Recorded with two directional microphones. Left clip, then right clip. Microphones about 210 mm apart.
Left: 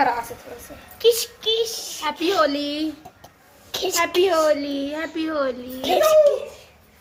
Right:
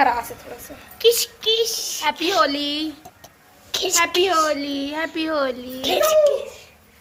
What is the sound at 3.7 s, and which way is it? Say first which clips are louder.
Speech: right 2 dB; 25° left (ahead or behind).